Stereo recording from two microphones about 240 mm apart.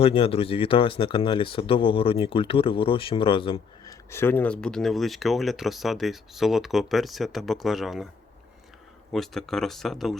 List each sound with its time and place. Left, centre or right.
0.0 s speech: left
4.1 s speech: centre
9.1 s speech: centre